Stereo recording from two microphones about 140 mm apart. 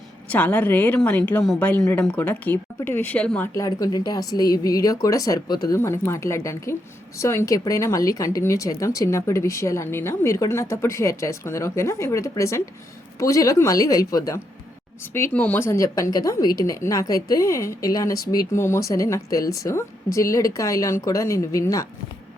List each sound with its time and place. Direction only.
0.3 s speech: 10° left (ahead or behind)
3.5 s a woman's voice: 25° left (ahead or behind)
15.1 s a woman's voice: 15° left (ahead or behind)